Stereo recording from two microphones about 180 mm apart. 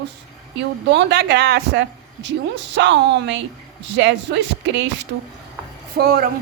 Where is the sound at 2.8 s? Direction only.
80° right.